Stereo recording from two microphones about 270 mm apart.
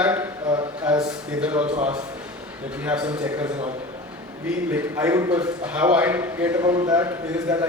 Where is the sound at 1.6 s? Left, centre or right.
Right.